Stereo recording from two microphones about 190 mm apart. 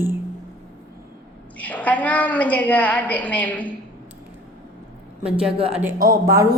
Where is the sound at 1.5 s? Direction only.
10° left (ahead or behind).